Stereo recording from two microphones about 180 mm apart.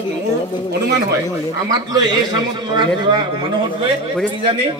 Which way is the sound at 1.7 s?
20° right (ahead or behind).